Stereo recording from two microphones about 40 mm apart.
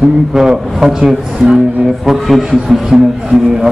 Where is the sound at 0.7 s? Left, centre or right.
Centre.